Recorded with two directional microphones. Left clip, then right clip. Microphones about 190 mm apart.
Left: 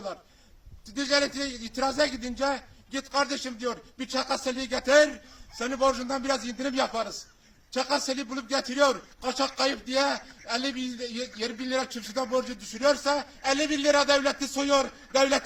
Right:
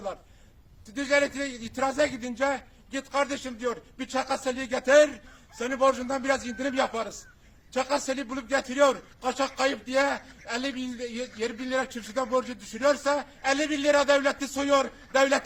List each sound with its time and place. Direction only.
0.9 s speech: 20° right (ahead or behind)